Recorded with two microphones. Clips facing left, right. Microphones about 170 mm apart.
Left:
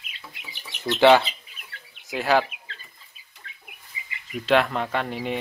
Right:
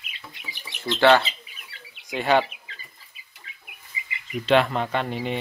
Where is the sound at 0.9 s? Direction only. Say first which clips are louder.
Left 2 dB; 10° left (ahead or behind).